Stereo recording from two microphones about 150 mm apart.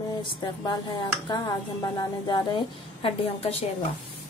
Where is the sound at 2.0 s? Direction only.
30° left (ahead or behind).